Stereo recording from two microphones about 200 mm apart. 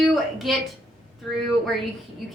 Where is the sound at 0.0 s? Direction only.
Centre (ahead or behind).